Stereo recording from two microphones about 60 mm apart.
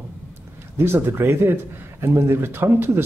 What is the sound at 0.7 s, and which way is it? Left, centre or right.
Speech, right.